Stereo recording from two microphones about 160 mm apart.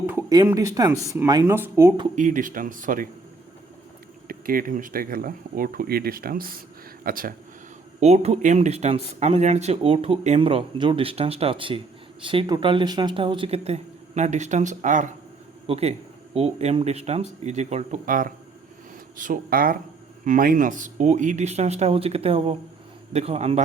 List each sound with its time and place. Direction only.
0.0 s a sound: 10° right (ahead or behind)
0.3 s speech: 20° right (ahead or behind)
2.1 s speech: 55° right (ahead or behind)
4.3 s speech: 65° right (ahead or behind)
8.0 s speech: 40° right (ahead or behind)
15.6 s speech: 40° right (ahead or behind)
18.0 s speech: 60° right (ahead or behind); by 23.6 s 40° right (ahead or behind)